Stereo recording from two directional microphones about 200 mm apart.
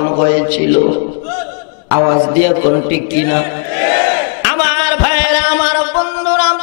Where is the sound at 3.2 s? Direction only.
15° left (ahead or behind).